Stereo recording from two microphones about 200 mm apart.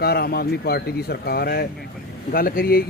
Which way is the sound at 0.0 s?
50° left (ahead or behind).